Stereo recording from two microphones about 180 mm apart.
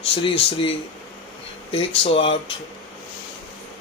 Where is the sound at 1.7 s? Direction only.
30° left (ahead or behind).